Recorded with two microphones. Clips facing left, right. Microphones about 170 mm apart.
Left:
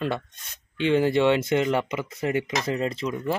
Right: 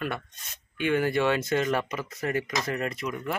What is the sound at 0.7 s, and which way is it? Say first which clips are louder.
Speech: left 4 dB; 25° left (ahead or behind).